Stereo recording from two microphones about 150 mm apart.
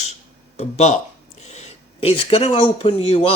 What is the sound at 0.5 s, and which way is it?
Speech, 50° left (ahead or behind).